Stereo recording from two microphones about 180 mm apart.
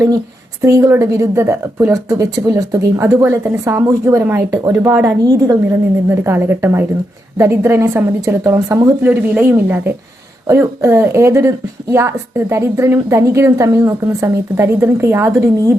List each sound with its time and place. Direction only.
0.6 s a woman's voice: 15° right (ahead or behind)